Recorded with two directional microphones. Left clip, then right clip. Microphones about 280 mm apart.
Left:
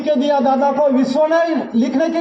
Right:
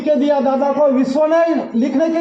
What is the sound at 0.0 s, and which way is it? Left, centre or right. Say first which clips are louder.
A man's voice: right 1 dB; left.